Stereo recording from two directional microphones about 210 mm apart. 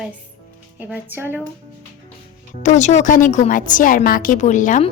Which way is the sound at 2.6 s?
35° left (ahead or behind).